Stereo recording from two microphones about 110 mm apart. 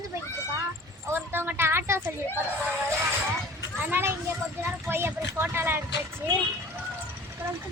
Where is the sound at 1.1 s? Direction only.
20° right (ahead or behind).